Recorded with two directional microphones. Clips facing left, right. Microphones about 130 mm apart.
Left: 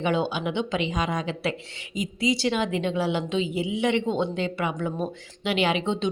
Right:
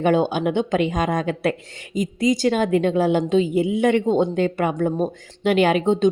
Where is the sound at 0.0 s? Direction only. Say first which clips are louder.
Right 7 dB; 45° right (ahead or behind).